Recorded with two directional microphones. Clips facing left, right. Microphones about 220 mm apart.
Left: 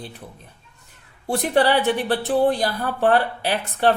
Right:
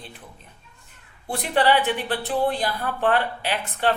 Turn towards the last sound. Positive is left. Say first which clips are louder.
# left 4 dB
turn(degrees=40)  # may be behind; listen again after turning